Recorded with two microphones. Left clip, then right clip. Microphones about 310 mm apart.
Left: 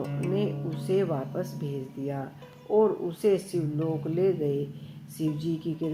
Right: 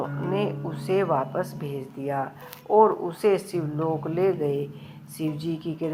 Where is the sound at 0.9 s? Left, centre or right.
Right.